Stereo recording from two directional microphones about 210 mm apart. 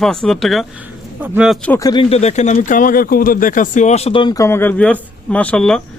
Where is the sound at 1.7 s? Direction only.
20° left (ahead or behind).